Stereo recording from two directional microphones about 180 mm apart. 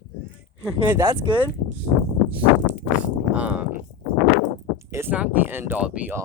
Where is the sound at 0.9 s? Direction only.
15° right (ahead or behind).